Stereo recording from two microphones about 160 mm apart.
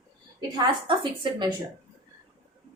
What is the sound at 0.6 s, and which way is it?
Speech, 30° right (ahead or behind).